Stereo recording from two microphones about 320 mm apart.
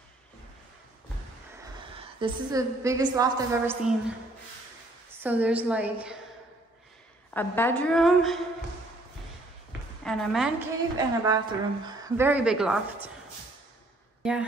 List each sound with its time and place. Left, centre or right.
1.6 s a woman's voice: centre
5.1 s speech: centre
7.3 s speech: centre
10.0 s speech: centre
11.2 s speech: centre
14.2 s speech: centre